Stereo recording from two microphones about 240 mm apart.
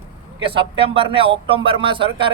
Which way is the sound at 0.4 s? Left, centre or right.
Right.